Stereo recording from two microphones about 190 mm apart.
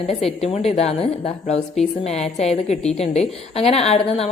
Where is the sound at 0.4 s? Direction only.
35° left (ahead or behind).